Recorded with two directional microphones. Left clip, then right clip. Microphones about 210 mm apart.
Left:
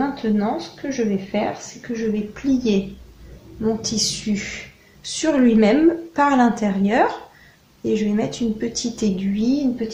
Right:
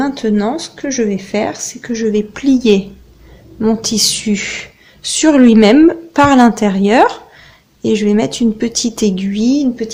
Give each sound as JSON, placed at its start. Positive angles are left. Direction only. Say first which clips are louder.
{"t": 0.0, "sound": "speech", "louder": "right 7 dB", "side_deg": -45}